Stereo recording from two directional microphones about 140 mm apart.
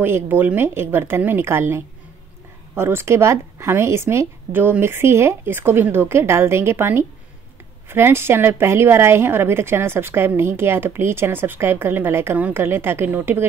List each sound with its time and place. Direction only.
0.0 s a woman's voice: 15° right (ahead or behind)